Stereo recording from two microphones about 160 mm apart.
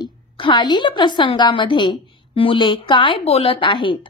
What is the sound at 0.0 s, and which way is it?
A woman's voice, 30° left (ahead or behind).